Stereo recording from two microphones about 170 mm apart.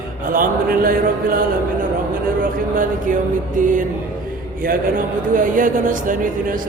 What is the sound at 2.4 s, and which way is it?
Mantra, 50° right (ahead or behind).